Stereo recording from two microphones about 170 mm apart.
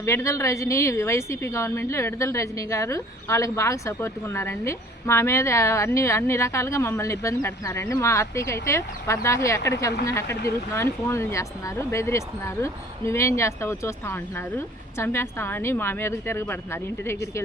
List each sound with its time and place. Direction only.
0.0 s a woman's voice: 15° left (ahead or behind)